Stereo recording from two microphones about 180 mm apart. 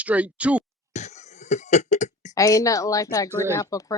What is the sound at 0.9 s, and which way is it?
Cough, 40° left (ahead or behind).